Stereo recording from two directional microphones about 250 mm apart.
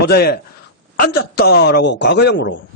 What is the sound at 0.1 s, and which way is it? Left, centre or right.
Speech, left.